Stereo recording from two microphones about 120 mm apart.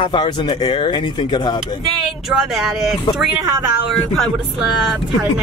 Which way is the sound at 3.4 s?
30° right (ahead or behind).